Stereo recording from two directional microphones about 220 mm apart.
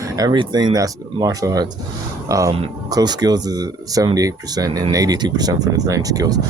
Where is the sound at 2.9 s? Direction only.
20° right (ahead or behind).